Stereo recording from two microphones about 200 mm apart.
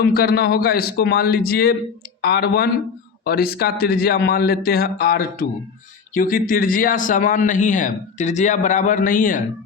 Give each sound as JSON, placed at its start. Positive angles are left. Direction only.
{"t": 0.0, "sound": "a man's voice", "side_deg": 50}